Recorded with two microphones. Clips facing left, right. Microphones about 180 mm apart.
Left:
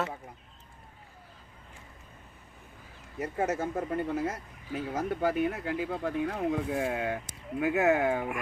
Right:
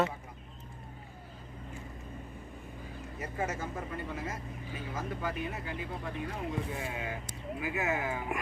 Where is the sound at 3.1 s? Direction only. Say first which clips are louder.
Left 6 dB; 65° left (ahead or behind).